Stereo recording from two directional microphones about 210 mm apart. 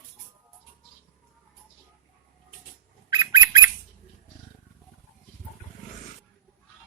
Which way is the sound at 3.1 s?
20° right (ahead or behind).